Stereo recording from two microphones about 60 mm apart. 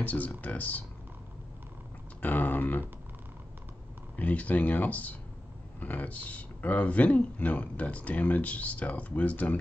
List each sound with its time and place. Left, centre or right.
0.0 s speech: left
2.2 s a sound: left
4.2 s speech: left